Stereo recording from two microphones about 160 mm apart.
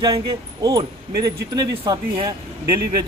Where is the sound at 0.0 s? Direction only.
25° right (ahead or behind).